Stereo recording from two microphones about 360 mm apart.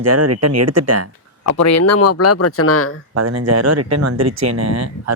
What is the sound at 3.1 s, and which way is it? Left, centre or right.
Speech, right.